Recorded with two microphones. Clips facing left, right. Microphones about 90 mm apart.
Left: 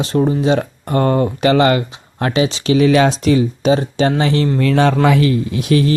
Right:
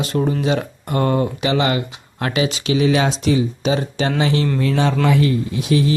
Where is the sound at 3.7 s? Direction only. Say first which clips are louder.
Left 6 dB; 35° left (ahead or behind).